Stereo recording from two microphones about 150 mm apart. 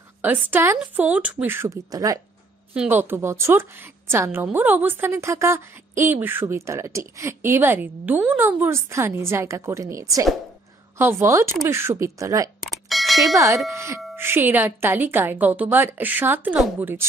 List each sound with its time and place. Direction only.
0.2 s a woman's voice: 10° right (ahead or behind)
2.7 s a woman's voice: 10° right (ahead or behind)
12.8 s a sound: centre (ahead or behind)
13.7 s a woman's voice: 20° right (ahead or behind)